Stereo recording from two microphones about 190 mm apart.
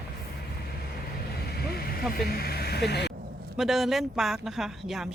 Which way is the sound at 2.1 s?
55° left (ahead or behind).